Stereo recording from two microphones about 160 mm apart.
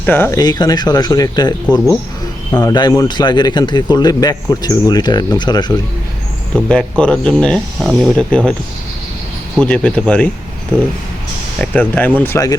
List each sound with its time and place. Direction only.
0.0 s speech: 15° left (ahead or behind)
6.7 s speech: 5° left (ahead or behind)
9.6 s speech: 5° left (ahead or behind)
11.6 s speech: 10° left (ahead or behind)